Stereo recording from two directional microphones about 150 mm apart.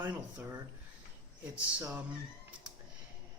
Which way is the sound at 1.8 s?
20° right (ahead or behind).